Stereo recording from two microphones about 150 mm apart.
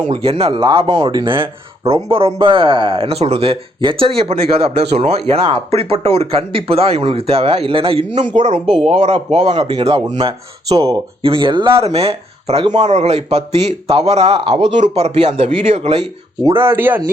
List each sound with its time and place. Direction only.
0.1 s speech: 40° right (ahead or behind)
8.4 s speech: 55° right (ahead or behind)
8.6 s speech: centre (ahead or behind)
8.9 s speech: 45° right (ahead or behind)
10.7 s speech: 25° right (ahead or behind)
11.2 s speech: 35° right (ahead or behind)
16.6 s speech: 15° right (ahead or behind)